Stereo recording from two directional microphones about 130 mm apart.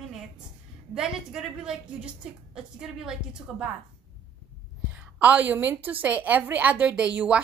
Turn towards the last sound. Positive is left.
turn(degrees=-10)  # may be behind; listen again after turning